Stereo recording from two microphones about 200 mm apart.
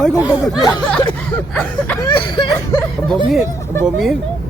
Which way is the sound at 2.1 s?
25° left (ahead or behind).